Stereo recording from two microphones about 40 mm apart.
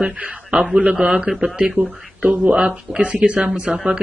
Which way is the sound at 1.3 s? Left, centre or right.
Right.